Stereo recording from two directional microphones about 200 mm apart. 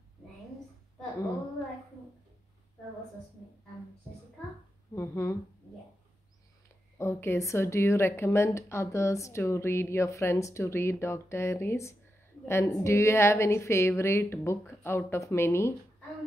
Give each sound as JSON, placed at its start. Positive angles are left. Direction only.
{"t": 4.9, "sound": "a woman's voice", "side_deg": 15}
{"t": 7.0, "sound": "a woman's voice", "side_deg": 10}